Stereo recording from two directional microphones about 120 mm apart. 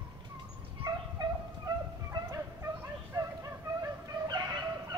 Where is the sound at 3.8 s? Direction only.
35° right (ahead or behind).